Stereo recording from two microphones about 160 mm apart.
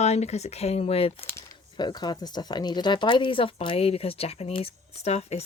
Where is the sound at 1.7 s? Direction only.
25° left (ahead or behind).